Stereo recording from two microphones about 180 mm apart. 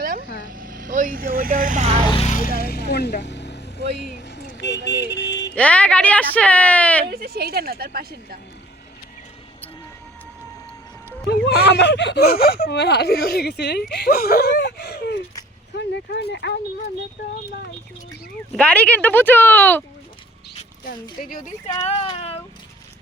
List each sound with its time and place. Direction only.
0.0 s vehicle: 55° right (ahead or behind); by 2.0 s 35° right (ahead or behind)
2.1 s vehicle: 40° left (ahead or behind); by 3.6 s 70° left (ahead or behind)
3.9 s speech: 70° left (ahead or behind)
5.5 s a woman's voice: 5° left (ahead or behind)
7.1 s speech: 60° right (ahead or behind)
11.3 s speech: 65° left (ahead or behind)
18.5 s a woman's voice: 5° left (ahead or behind)
20.8 s speech: 50° left (ahead or behind)
21.8 s speech: 25° left (ahead or behind)